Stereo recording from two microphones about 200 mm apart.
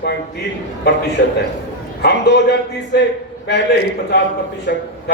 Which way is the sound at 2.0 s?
60° left (ahead or behind).